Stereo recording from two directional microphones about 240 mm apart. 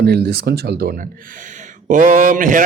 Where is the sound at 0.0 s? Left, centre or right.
Right.